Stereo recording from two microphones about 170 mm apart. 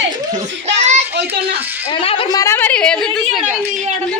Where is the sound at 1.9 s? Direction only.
30° left (ahead or behind).